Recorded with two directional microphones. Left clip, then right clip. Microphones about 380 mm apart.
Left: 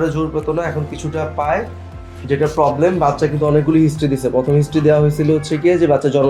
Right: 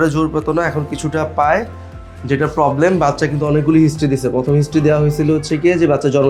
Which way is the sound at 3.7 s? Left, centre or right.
Right.